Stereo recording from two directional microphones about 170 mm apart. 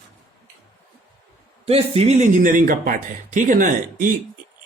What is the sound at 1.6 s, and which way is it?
Speech, 35° right (ahead or behind).